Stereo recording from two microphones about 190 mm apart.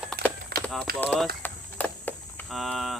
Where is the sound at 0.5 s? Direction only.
55° right (ahead or behind).